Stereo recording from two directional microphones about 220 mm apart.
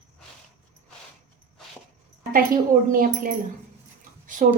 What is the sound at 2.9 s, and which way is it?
Speech, 40° right (ahead or behind).